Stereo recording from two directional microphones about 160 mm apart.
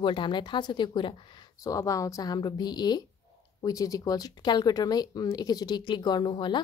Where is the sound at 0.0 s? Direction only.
30° left (ahead or behind).